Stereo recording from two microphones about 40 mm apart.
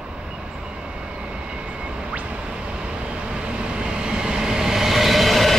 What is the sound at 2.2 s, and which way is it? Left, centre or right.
Vehicle, right.